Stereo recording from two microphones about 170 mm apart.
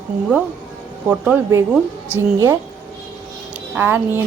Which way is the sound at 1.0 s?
10° right (ahead or behind).